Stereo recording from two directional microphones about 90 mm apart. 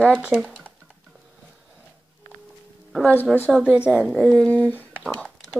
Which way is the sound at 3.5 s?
15° right (ahead or behind).